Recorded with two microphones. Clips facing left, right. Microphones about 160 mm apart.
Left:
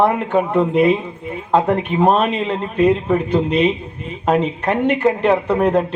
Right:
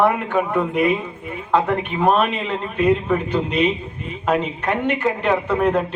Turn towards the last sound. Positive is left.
turn(degrees=35)  # may be behind; listen again after turning